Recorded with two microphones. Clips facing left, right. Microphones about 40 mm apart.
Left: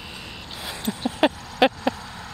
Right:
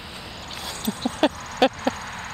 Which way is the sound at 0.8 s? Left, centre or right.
Centre.